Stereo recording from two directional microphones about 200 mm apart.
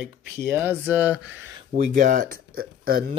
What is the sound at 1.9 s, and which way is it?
Speech, 40° right (ahead or behind).